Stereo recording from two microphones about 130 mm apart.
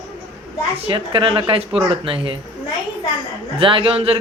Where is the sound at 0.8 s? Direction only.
40° right (ahead or behind).